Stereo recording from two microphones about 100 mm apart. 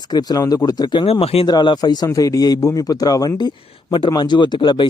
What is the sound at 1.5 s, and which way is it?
A man's voice, 45° left (ahead or behind).